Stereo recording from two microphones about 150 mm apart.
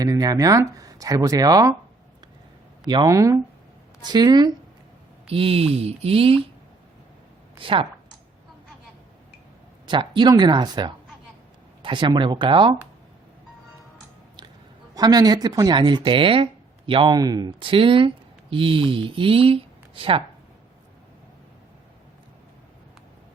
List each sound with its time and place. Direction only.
0.0 s speech: 25° right (ahead or behind)
2.8 s speech: 30° right (ahead or behind)
5.3 s speech: 40° right (ahead or behind)
7.6 s speech: 35° right (ahead or behind)
9.8 s speech: 30° right (ahead or behind)
14.9 s speech: 25° right (ahead or behind)